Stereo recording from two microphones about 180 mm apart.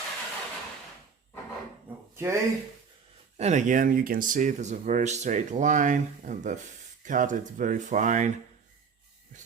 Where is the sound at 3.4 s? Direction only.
40° right (ahead or behind).